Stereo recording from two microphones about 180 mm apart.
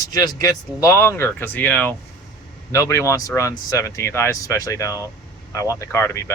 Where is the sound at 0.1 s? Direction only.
20° left (ahead or behind).